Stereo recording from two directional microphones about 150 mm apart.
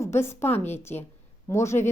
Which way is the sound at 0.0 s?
15° left (ahead or behind).